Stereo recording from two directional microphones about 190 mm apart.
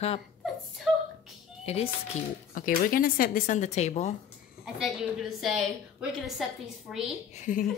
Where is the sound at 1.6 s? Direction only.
35° left (ahead or behind).